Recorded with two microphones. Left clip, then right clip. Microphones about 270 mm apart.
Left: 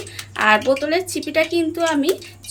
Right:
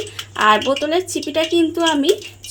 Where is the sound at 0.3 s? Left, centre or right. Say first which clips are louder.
Right 1 dB; right.